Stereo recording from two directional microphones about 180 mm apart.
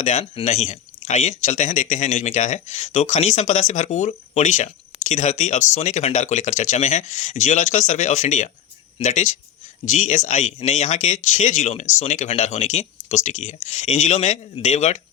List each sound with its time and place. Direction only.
0.0 s speech: 35° left (ahead or behind)